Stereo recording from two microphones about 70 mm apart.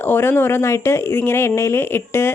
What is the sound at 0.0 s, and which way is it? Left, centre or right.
Speech, left.